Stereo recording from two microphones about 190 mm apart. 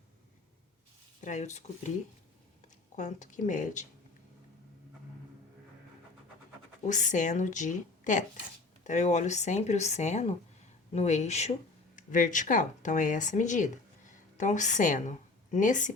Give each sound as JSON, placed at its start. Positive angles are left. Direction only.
{"t": 1.2, "sound": "speech", "side_deg": 40}
{"t": 2.9, "sound": "speech", "side_deg": 40}
{"t": 6.8, "sound": "a woman's voice", "side_deg": 40}